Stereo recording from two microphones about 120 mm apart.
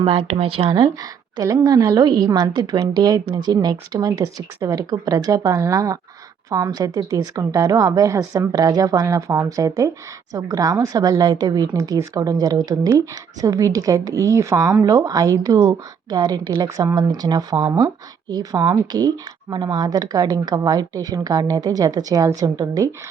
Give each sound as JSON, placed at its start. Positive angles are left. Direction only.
{"t": 0.0, "sound": "speech", "side_deg": -45}
{"t": 1.6, "sound": "a woman's voice", "side_deg": -25}